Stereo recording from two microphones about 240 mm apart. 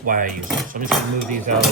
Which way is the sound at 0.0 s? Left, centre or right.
Right.